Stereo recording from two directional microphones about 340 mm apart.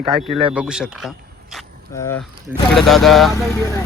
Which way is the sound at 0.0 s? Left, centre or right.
Centre.